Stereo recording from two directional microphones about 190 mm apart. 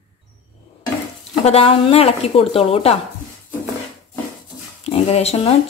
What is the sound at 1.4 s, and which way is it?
A woman's voice, 30° left (ahead or behind).